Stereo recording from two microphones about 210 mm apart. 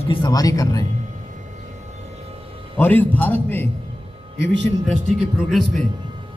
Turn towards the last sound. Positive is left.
turn(degrees=0)  # may be behind; listen again after turning